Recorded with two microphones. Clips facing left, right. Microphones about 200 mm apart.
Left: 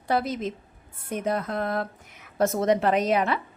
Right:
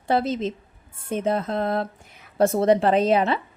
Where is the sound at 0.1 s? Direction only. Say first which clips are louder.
Right 3 dB; 25° right (ahead or behind).